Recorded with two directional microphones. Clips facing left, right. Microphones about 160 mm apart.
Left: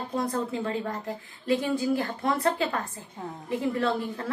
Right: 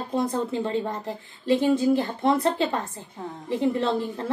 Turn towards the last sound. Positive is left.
turn(degrees=-25)  # may be behind; listen again after turning